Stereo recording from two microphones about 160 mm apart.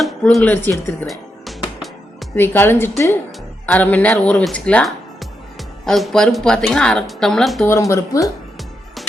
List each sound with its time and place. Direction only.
0.0 s speech: centre (ahead or behind)
1.0 s music: centre (ahead or behind)
2.3 s a woman's voice: 10° left (ahead or behind)
7.7 s speech: 20° left (ahead or behind)